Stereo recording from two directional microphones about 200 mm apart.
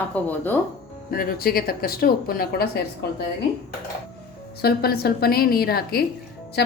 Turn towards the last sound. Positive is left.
turn(degrees=55)  # may be behind; listen again after turning